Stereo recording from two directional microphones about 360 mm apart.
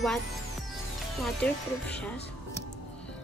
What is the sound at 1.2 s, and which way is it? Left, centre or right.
Speech, centre.